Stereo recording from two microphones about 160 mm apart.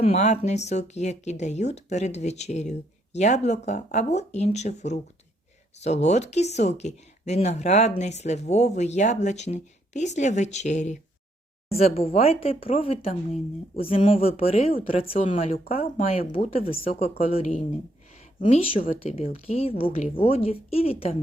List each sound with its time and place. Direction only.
0.0 s a woman's voice: 45° left (ahead or behind)